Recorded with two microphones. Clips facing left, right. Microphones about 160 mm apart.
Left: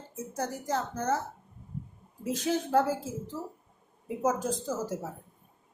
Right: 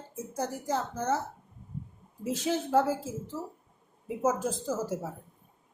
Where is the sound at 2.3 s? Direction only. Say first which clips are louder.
Even; 5° right (ahead or behind).